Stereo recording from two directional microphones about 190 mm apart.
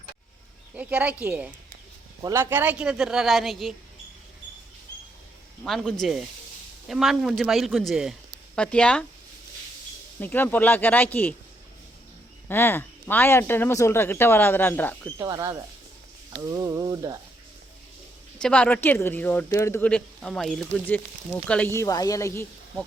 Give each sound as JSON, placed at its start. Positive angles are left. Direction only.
{"t": 0.8, "sound": "speech", "side_deg": -5}
{"t": 5.6, "sound": "speech", "side_deg": 0}
{"t": 10.2, "sound": "speech", "side_deg": 10}
{"t": 12.5, "sound": "speech", "side_deg": 10}
{"t": 15.2, "sound": "speech", "side_deg": -20}
{"t": 16.3, "sound": "a sound", "side_deg": -20}
{"t": 18.3, "sound": "speech", "side_deg": 5}